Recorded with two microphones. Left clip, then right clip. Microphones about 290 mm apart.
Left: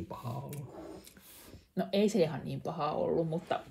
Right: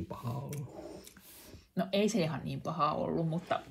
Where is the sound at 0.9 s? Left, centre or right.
Centre.